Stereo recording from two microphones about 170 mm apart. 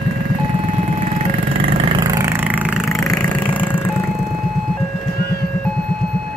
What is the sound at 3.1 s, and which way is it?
Vehicle, 5° left (ahead or behind).